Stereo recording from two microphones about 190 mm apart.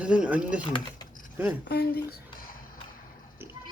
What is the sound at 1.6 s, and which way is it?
Speech, 55° left (ahead or behind).